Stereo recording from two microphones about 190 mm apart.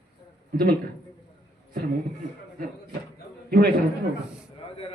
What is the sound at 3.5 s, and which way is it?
Speech, 55° right (ahead or behind).